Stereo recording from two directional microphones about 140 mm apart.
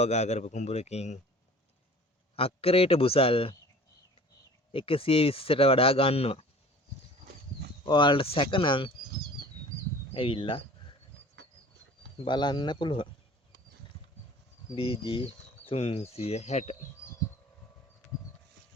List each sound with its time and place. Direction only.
0.0 s a man's voice: 55° left (ahead or behind)
2.3 s a man's voice: 45° left (ahead or behind)
4.7 s speech: 40° left (ahead or behind)
7.9 s speech: 35° left (ahead or behind)
10.2 s speech: 40° left (ahead or behind)
12.1 s speech: 35° left (ahead or behind)
14.8 s a man's voice: 40° left (ahead or behind)